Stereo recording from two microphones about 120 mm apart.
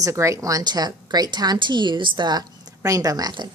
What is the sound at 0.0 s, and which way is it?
A woman's voice, 25° right (ahead or behind).